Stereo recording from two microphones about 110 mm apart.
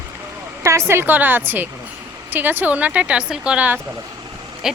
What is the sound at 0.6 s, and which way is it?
Speech, 25° right (ahead or behind).